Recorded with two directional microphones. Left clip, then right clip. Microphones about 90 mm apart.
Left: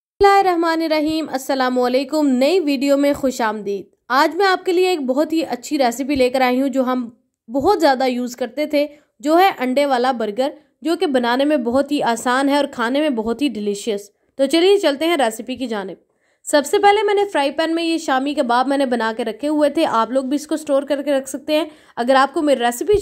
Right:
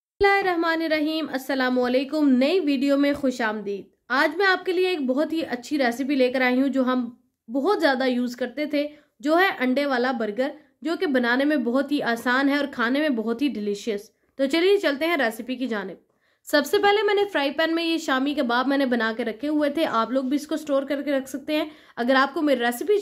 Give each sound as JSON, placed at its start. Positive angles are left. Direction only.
{"t": 0.2, "sound": "a woman's voice", "side_deg": 45}
{"t": 16.4, "sound": "a woman's voice", "side_deg": 25}